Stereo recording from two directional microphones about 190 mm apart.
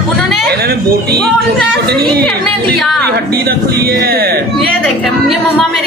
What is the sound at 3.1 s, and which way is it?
A man's voice, 55° right (ahead or behind).